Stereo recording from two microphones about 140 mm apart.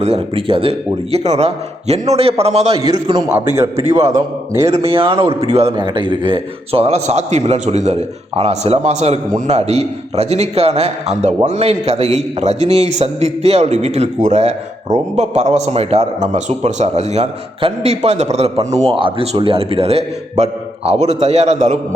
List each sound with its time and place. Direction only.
0.0 s a man's voice: 45° right (ahead or behind)
2.6 s a man's voice: 30° right (ahead or behind)
3.2 s a man's voice: 20° right (ahead or behind)
4.7 s a man's voice: 45° right (ahead or behind)